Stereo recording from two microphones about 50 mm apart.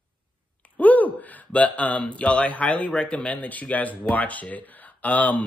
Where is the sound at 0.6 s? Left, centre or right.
Left.